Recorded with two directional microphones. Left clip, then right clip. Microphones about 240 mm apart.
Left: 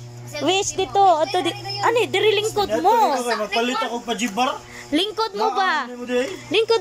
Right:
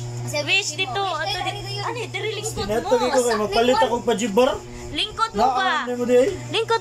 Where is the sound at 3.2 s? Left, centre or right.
Right.